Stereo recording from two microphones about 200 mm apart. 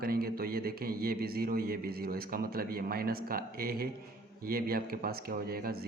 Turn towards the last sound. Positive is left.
turn(degrees=-50)  # may be behind; listen again after turning